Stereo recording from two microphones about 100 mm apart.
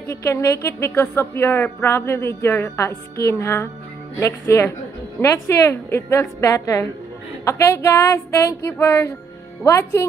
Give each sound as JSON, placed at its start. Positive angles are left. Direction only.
{"t": 0.1, "sound": "a woman's voice", "side_deg": 30}